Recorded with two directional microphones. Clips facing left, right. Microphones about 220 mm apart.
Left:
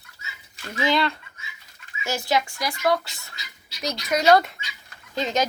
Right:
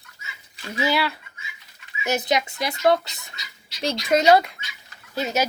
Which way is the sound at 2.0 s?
20° right (ahead or behind).